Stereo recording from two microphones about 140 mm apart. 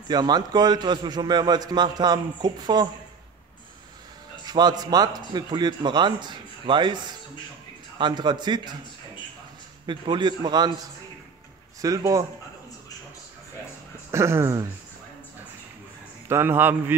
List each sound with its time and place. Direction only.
0.1 s a man's voice: 30° right (ahead or behind)
4.5 s a man's voice: 30° right (ahead or behind)
9.8 s a man's voice: 35° right (ahead or behind)
11.8 s a man's voice: 25° right (ahead or behind)
14.1 s a man's voice: 20° right (ahead or behind)
16.3 s a man's voice: 15° right (ahead or behind)